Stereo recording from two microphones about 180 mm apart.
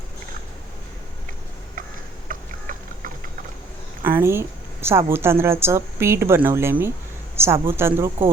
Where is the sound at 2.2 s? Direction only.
50° right (ahead or behind).